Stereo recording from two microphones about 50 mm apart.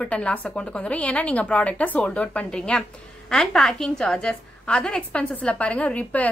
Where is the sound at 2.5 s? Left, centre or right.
Centre.